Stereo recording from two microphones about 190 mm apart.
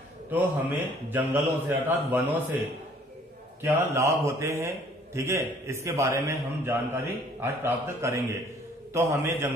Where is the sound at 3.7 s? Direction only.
15° right (ahead or behind).